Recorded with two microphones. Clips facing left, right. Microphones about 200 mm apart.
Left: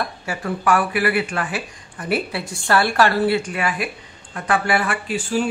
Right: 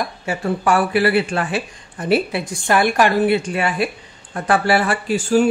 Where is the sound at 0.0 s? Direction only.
25° right (ahead or behind).